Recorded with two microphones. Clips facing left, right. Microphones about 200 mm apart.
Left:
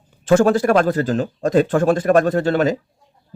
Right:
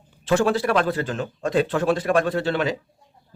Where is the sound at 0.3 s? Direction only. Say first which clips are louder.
Left 6 dB; 45° left (ahead or behind).